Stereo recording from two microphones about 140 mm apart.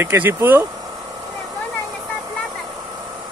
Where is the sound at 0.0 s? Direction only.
15° right (ahead or behind).